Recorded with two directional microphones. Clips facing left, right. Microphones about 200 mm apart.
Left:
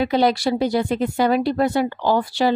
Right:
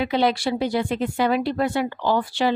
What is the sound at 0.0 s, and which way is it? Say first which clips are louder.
A woman's voice: left 3 dB; 40° left (ahead or behind).